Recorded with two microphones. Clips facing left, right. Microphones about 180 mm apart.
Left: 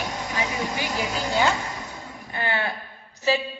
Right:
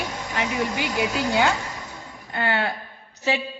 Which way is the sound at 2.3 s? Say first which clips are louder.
Right 3 dB; 65° right (ahead or behind).